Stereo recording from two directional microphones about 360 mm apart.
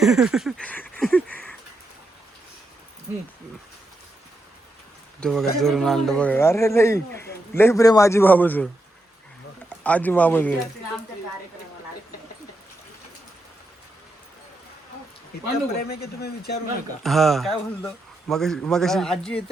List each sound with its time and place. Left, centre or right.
0.0 s a sound: centre
5.2 s a man's voice: centre
15.8 s a man's voice: left
17.0 s speech: centre